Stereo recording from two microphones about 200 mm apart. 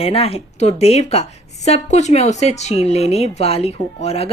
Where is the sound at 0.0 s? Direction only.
30° left (ahead or behind).